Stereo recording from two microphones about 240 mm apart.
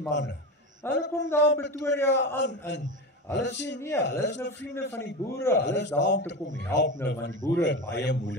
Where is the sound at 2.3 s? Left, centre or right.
Left.